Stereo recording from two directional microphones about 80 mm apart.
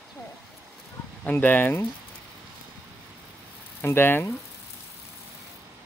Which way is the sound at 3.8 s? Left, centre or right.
Left.